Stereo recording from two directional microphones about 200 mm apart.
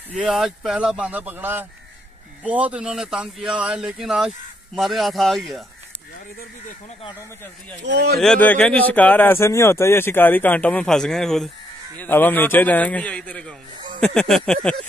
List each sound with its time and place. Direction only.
0.1 s speech: 5° right (ahead or behind)
7.8 s speech: 60° right (ahead or behind)
8.2 s speech: 5° left (ahead or behind)